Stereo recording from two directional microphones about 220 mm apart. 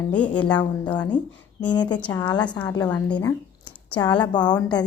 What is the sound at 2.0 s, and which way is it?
Speech, 10° left (ahead or behind).